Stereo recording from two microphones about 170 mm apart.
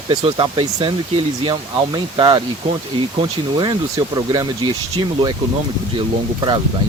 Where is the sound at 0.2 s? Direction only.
35° right (ahead or behind).